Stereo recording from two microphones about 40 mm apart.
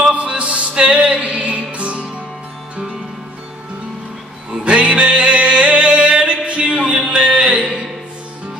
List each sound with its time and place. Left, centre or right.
0.1 s music: right
4.5 s music: right
7.1 s a sound: centre
7.3 s music: right